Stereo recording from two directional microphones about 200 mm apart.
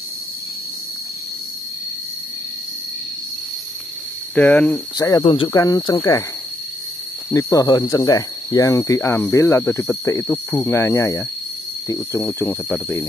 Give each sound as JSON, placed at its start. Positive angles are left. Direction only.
{"t": 4.4, "sound": "speech", "side_deg": 10}
{"t": 5.5, "sound": "speech", "side_deg": 15}
{"t": 7.2, "sound": "speech", "side_deg": 15}